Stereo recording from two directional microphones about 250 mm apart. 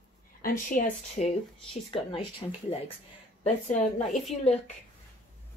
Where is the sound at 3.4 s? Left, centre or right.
Left.